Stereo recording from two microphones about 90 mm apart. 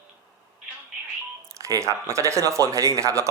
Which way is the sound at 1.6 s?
35° right (ahead or behind).